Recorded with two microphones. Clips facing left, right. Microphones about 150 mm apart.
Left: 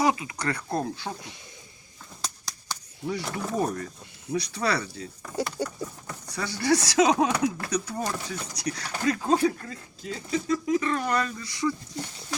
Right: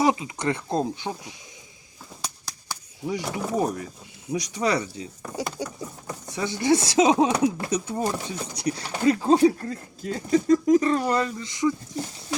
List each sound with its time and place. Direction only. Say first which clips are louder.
0.0 s speech: right 3 dB; 20° right (ahead or behind)
9.6 s speech: right 6 dB; 45° right (ahead or behind)
11.2 s speech: right 4 dB; 20° right (ahead or behind)